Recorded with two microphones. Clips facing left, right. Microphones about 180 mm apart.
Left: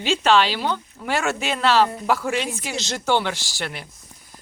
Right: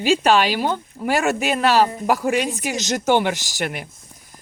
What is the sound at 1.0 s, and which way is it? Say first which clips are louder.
Speech: right 5 dB; 15° right (ahead or behind).